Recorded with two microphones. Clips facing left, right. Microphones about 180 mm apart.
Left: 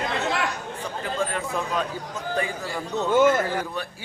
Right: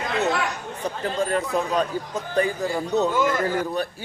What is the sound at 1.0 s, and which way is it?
Speech, 40° right (ahead or behind).